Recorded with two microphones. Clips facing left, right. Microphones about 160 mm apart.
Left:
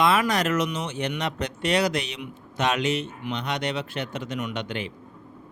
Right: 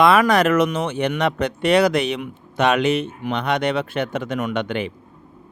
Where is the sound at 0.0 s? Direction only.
60° right (ahead or behind).